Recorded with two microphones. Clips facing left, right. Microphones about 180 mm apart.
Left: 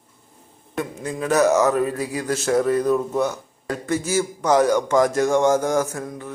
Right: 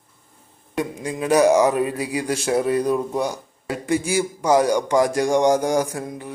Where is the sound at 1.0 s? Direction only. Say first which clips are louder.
Right 2 dB; 15° right (ahead or behind).